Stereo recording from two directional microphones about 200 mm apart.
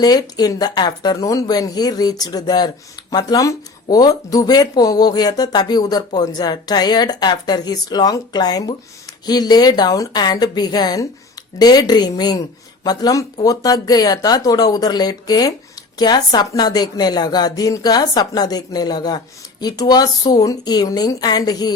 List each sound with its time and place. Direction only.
0.0 s a woman's voice: 20° left (ahead or behind)